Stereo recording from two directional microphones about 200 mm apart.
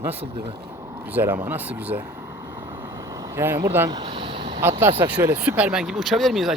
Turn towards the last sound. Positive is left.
turn(degrees=0)  # may be behind; listen again after turning